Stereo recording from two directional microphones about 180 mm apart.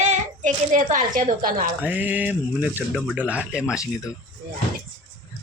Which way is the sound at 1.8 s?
10° right (ahead or behind).